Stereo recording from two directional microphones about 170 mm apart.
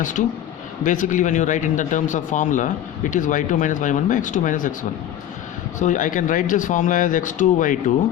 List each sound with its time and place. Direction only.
0.0 s speech: 50° left (ahead or behind)